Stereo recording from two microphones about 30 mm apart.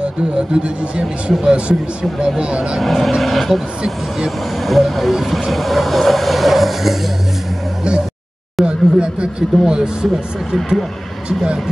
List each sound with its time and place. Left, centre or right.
0.0 s speech: right
2.1 s speech: centre
2.4 s speech: right
2.8 s speech: centre
4.6 s speech: centre
5.5 s vehicle: centre
8.6 s a sound: right
9.8 s speech: centre
11.2 s speech: right